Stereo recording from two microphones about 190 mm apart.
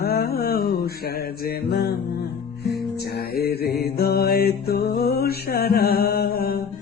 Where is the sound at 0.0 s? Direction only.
55° left (ahead or behind).